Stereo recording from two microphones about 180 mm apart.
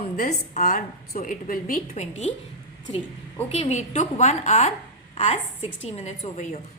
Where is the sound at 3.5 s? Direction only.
35° left (ahead or behind).